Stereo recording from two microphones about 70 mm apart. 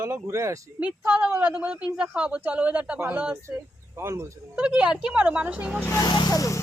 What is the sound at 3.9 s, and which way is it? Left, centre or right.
Speech, right.